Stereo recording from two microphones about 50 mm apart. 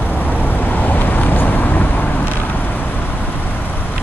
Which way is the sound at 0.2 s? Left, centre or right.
Left.